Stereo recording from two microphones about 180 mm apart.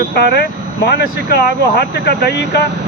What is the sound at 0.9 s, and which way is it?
Speech, 65° left (ahead or behind).